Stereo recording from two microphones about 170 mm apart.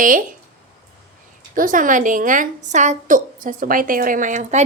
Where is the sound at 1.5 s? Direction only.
50° right (ahead or behind).